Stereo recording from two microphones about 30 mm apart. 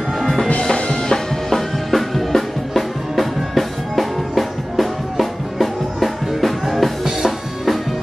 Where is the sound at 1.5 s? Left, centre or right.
Centre.